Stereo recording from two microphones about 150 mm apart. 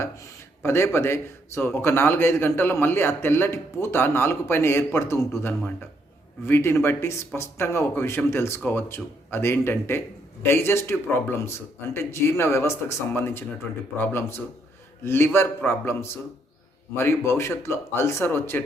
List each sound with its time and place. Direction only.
0.0 s speech: 20° left (ahead or behind)